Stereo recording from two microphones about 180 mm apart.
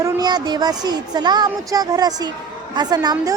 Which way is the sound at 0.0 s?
20° right (ahead or behind).